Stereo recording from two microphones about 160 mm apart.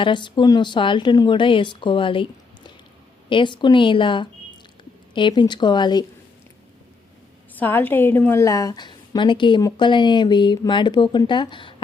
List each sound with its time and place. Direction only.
0.0 s a woman's voice: 30° left (ahead or behind)
3.2 s a woman's voice: 30° left (ahead or behind)
7.5 s a woman's voice: 10° left (ahead or behind); by 11.7 s 30° left (ahead or behind)